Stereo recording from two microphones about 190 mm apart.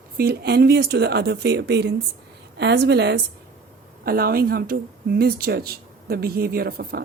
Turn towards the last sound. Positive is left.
turn(degrees=-55)  # may be behind; listen again after turning